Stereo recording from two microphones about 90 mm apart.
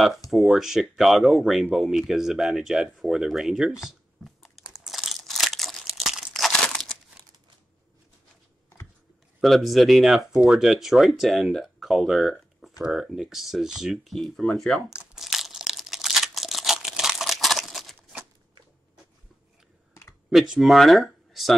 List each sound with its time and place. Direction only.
0.3 s speech: centre (ahead or behind)
4.2 s crumpling: centre (ahead or behind)
9.4 s speech: centre (ahead or behind)
14.9 s crumpling: 5° right (ahead or behind)
19.9 s computer keyboard: 35° left (ahead or behind)
20.2 s speech: 5° right (ahead or behind)